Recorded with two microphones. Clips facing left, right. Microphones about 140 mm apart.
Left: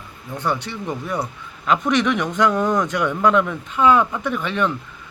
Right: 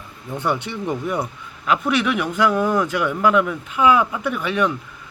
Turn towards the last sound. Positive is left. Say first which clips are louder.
# right 1 dB
turn(degrees=-10)  # may be behind; listen again after turning